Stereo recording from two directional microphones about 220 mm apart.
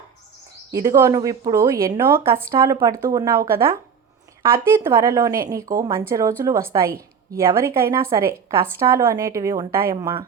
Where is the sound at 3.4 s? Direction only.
45° right (ahead or behind).